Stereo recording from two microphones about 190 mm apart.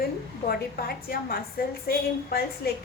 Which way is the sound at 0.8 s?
50° left (ahead or behind).